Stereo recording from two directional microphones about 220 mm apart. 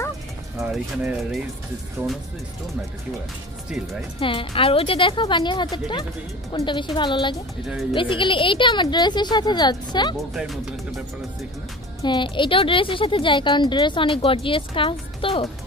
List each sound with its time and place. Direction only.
0.6 s speech: centre (ahead or behind)
4.2 s speech: 25° left (ahead or behind)
10.3 s speech: centre (ahead or behind)
12.0 s speech: 20° left (ahead or behind)